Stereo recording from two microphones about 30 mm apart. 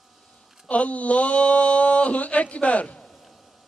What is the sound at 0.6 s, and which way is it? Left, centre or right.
Speech, left.